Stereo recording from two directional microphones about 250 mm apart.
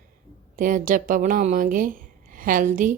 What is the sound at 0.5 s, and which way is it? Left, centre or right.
A woman's voice, right.